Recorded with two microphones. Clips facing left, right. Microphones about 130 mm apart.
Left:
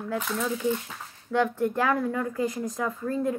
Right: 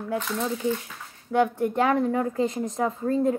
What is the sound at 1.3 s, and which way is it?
Speech, 20° right (ahead or behind).